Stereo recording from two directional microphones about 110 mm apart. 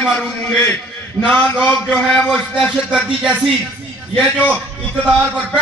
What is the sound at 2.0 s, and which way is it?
A man's voice, 5° left (ahead or behind).